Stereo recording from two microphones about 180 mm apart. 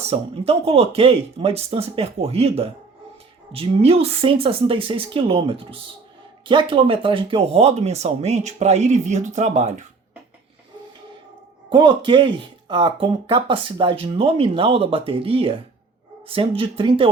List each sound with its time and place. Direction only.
0.0 s speech: 35° right (ahead or behind)
11.7 s speech: 25° right (ahead or behind)